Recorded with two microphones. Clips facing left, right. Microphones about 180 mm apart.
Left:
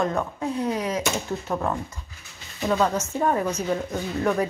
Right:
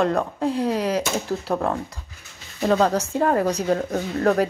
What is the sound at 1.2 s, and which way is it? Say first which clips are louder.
A woman's voice: right 3 dB; 35° right (ahead or behind).